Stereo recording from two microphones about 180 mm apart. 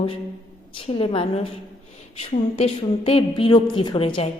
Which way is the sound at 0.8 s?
30° left (ahead or behind).